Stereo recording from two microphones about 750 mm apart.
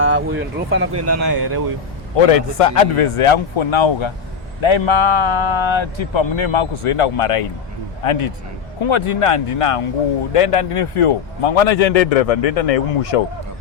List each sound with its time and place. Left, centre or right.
0.0 s speech: centre
2.1 s a man's voice: left